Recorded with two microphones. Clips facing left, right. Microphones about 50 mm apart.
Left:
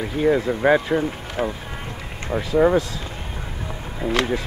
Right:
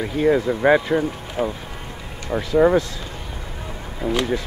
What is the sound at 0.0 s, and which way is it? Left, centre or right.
Speech, centre.